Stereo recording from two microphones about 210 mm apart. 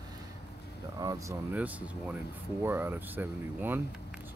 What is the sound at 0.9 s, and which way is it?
Speech, 15° right (ahead or behind).